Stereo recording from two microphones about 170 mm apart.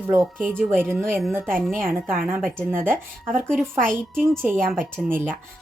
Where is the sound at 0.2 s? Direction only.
Centre (ahead or behind).